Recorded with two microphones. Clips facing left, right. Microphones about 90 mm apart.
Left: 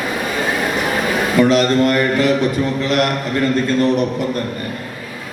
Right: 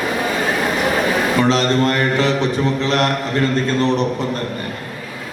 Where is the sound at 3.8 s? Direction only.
30° right (ahead or behind).